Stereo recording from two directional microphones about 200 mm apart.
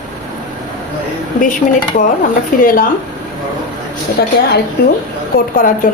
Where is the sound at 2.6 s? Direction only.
45° left (ahead or behind).